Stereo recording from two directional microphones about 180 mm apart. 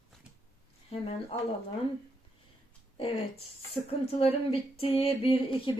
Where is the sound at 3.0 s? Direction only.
30° left (ahead or behind).